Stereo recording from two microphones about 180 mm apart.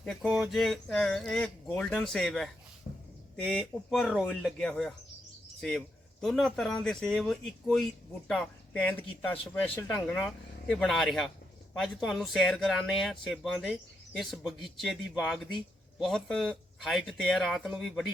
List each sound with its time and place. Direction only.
0.0 s speech: centre (ahead or behind)
2.9 s a sound: 45° left (ahead or behind)
3.4 s speech: 5° left (ahead or behind)